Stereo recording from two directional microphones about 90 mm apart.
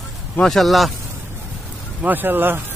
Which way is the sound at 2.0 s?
20° right (ahead or behind).